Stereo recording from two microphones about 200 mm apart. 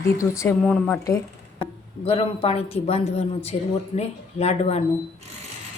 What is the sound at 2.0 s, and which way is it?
A man's voice, 30° left (ahead or behind).